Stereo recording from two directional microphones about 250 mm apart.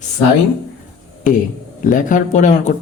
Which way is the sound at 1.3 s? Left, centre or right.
Left.